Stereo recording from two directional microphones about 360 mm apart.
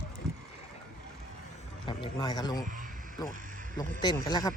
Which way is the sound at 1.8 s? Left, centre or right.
Centre.